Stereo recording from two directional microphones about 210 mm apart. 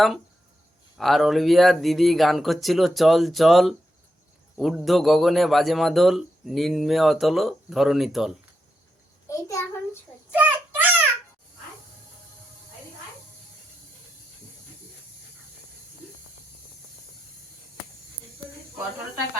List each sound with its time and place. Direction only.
0.9 s a man's voice: centre (ahead or behind)
9.3 s a child's voice: 15° left (ahead or behind)
10.3 s child singing: 10° right (ahead or behind)